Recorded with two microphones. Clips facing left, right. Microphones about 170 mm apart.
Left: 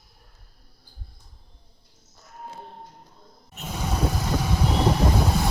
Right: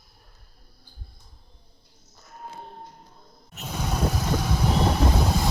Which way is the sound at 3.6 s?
Centre (ahead or behind).